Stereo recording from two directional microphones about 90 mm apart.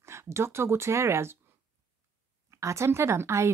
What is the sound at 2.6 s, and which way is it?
Speech, 35° right (ahead or behind).